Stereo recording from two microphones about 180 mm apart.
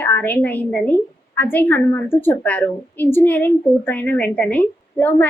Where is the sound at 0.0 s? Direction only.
10° left (ahead or behind).